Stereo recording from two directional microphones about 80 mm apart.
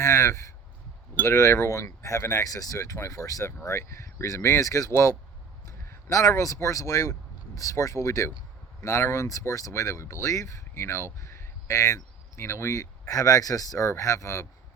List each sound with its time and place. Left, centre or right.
0.0 s speech: left